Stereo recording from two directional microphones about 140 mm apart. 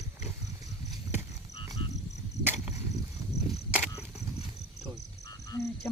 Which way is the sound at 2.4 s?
10° right (ahead or behind).